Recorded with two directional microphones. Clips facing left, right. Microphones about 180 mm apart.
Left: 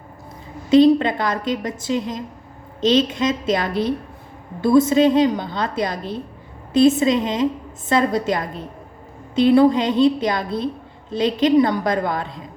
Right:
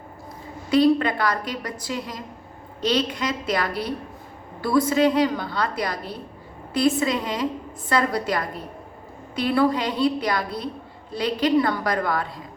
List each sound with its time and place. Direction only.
0.7 s a woman's voice: 25° left (ahead or behind)